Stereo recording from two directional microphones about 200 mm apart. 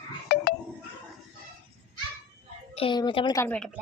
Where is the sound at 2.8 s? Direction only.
25° left (ahead or behind).